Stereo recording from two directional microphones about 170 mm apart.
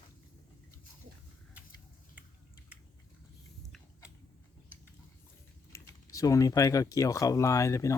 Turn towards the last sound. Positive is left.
turn(degrees=20)  # may be behind; listen again after turning